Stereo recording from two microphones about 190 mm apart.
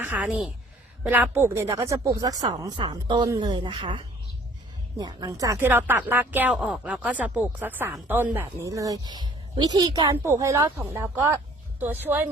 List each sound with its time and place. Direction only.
0.0 s a woman's voice: 5° right (ahead or behind)